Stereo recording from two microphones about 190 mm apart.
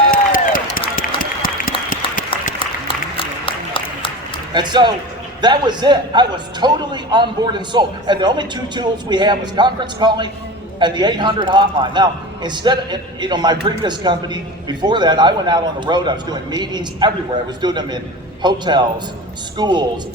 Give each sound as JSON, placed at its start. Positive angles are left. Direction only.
{"t": 0.1, "sound": "a sound", "side_deg": 45}
{"t": 0.9, "sound": "applause", "side_deg": 50}
{"t": 2.8, "sound": "applause", "side_deg": 25}
{"t": 4.5, "sound": "a man's voice", "side_deg": -25}